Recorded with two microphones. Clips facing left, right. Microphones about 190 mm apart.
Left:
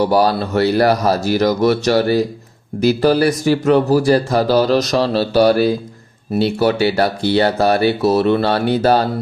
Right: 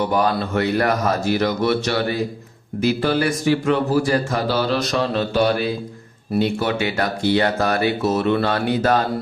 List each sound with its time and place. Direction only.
0.0 s speech: 35° left (ahead or behind)